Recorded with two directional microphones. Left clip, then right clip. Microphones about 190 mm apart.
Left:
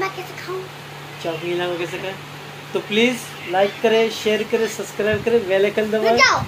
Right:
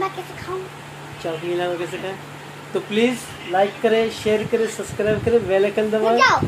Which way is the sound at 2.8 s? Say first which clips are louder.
Left 2 dB; 10° left (ahead or behind).